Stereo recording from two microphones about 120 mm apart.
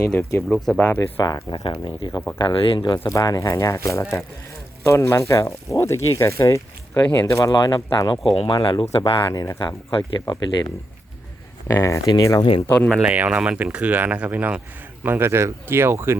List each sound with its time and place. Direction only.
0.0 s speech: 15° left (ahead or behind)
0.4 s speech: 5° left (ahead or behind)
0.8 s speech: 20° left (ahead or behind)
1.2 s speech: 35° left (ahead or behind)
3.0 s speech: 25° left (ahead or behind)
8.8 s speech: 50° left (ahead or behind)
9.1 s speech: 30° left (ahead or behind)
11.7 s speech: 25° left (ahead or behind)
12.9 s speech: 10° right (ahead or behind)